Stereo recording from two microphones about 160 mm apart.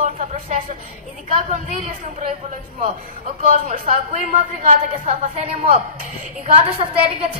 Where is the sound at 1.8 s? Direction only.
50° right (ahead or behind).